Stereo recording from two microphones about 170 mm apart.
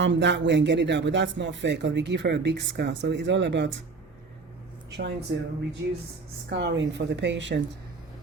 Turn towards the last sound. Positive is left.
turn(degrees=-90)